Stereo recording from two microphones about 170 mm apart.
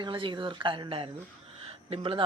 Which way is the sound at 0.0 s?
30° right (ahead or behind).